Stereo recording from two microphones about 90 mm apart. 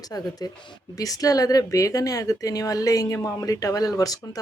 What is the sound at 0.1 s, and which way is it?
A woman's voice, 45° left (ahead or behind).